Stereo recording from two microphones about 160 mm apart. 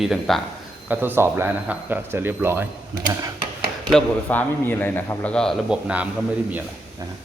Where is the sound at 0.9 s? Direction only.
10° right (ahead or behind).